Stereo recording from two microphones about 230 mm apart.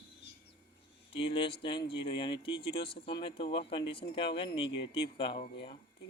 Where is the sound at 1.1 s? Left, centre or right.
Left.